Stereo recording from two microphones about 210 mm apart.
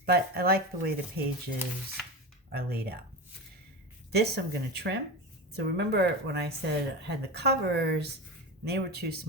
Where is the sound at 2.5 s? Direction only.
45° right (ahead or behind).